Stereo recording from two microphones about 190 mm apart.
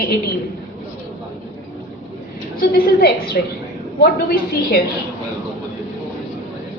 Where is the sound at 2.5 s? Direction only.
50° left (ahead or behind).